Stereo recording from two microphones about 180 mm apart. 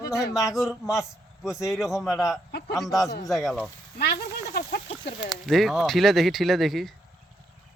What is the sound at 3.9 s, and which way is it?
Speech, 65° left (ahead or behind).